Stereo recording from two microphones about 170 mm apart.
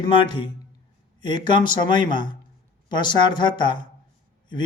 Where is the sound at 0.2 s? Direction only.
30° left (ahead or behind).